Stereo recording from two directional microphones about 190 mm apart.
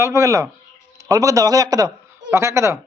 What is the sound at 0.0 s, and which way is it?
Speech, 15° right (ahead or behind).